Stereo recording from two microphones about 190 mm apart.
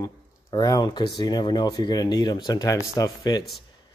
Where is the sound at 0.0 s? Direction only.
20° left (ahead or behind).